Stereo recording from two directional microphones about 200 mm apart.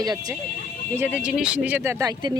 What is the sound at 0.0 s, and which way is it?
Speech, 20° right (ahead or behind).